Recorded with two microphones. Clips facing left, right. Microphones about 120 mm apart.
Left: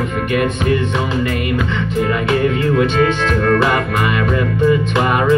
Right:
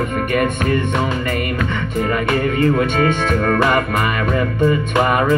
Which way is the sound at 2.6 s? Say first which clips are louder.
Left 1 dB; 45° right (ahead or behind).